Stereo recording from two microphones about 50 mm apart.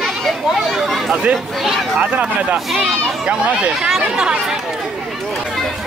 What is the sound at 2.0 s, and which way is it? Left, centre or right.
Speech, right.